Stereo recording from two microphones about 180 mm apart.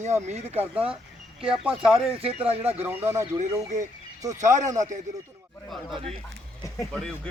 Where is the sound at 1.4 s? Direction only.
5° right (ahead or behind).